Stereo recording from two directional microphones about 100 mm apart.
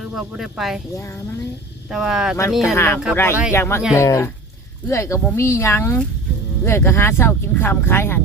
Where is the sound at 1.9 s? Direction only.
5° right (ahead or behind).